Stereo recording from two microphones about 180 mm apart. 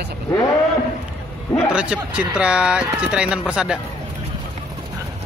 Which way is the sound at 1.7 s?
5° right (ahead or behind).